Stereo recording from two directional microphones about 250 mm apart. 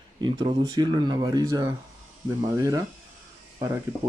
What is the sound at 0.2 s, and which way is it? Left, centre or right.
Speech, centre.